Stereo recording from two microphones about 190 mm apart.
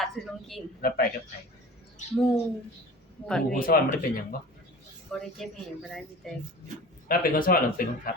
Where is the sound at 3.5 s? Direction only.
50° left (ahead or behind).